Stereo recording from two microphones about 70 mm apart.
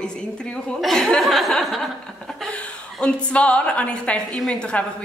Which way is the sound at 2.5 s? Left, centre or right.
Centre.